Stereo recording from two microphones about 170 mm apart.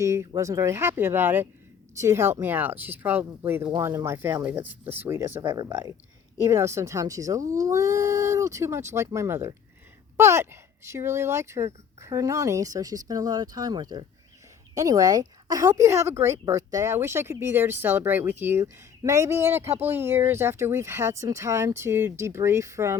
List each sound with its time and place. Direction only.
0.0 s a woman's voice: 15° right (ahead or behind)